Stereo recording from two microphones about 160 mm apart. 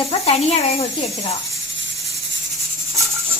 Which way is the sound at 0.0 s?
40° left (ahead or behind).